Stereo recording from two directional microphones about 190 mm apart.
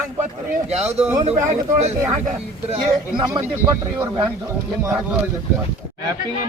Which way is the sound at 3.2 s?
25° right (ahead or behind).